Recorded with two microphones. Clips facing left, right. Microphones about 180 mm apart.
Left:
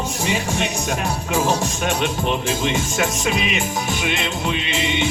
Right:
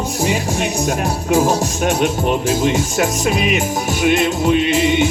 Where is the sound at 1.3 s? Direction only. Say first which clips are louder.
Right 6 dB; 40° right (ahead or behind).